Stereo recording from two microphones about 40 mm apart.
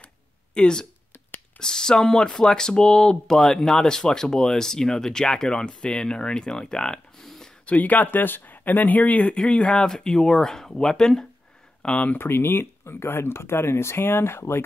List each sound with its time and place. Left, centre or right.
0.6 s speech: left
7.2 s a sound: centre
7.6 s speech: left
9.5 s speech: left
12.2 s speech: left